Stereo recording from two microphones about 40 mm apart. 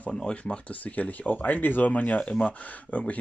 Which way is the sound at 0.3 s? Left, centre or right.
Left.